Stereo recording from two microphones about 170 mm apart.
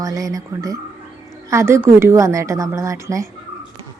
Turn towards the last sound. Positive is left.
turn(degrees=-15)  # may be behind; listen again after turning